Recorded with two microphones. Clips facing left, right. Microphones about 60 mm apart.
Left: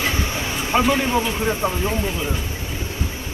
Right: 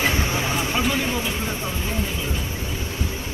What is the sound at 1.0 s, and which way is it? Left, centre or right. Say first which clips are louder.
Speech: left 4 dB; centre.